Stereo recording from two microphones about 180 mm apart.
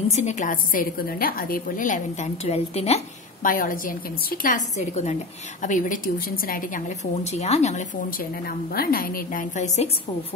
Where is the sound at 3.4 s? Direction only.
50° left (ahead or behind).